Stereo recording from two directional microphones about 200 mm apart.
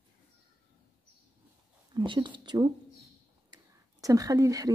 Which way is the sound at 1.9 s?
25° right (ahead or behind).